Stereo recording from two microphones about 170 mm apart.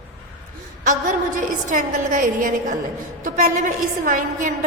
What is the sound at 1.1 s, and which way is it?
A woman's voice, 50° right (ahead or behind).